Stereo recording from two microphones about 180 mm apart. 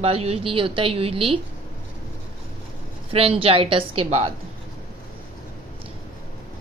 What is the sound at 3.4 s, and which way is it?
Speech, 30° right (ahead or behind).